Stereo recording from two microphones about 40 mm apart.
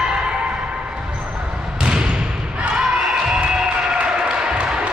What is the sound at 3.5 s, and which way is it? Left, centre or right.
Basketball bounce, right.